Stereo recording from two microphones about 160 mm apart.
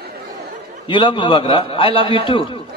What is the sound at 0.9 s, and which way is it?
A man's voice, 30° left (ahead or behind).